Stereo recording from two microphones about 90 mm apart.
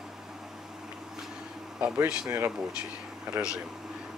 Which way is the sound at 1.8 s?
10° right (ahead or behind).